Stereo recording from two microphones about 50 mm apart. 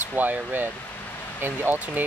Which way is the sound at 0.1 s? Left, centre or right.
Right.